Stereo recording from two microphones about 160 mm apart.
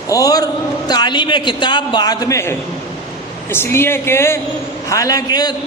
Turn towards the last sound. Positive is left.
turn(degrees=25)  # may be behind; listen again after turning